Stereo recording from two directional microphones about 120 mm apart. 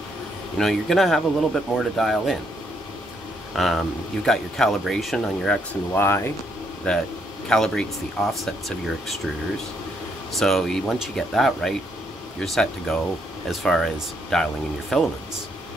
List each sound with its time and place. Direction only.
0.6 s speech: centre (ahead or behind)
3.5 s speech: 5° left (ahead or behind)
5.9 s speech: 20° left (ahead or behind)
6.8 s speech: 10° left (ahead or behind)
10.3 s speech: 5° left (ahead or behind)